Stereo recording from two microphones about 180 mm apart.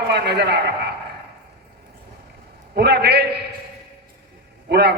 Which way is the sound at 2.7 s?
65° right (ahead or behind).